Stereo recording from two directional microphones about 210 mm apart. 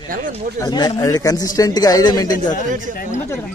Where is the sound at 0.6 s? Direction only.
20° left (ahead or behind).